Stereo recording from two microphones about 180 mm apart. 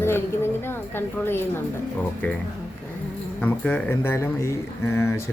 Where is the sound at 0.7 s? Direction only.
10° left (ahead or behind).